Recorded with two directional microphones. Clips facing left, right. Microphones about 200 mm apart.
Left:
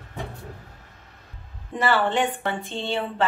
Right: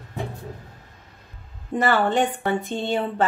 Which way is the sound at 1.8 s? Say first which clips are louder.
Right 2 dB; 45° right (ahead or behind).